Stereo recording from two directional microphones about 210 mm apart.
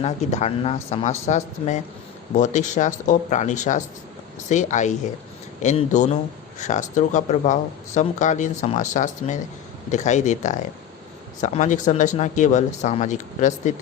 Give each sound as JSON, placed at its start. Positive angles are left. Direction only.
{"t": 0.0, "sound": "speech", "side_deg": 30}